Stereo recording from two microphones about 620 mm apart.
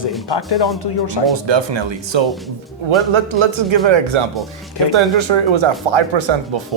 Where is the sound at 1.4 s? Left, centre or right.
Right.